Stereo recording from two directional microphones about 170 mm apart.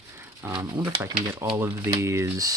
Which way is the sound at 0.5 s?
20° right (ahead or behind).